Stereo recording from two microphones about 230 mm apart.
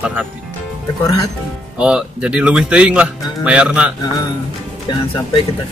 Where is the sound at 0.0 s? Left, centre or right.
Centre.